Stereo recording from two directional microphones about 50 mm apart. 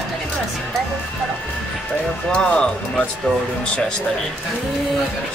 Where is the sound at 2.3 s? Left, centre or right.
Centre.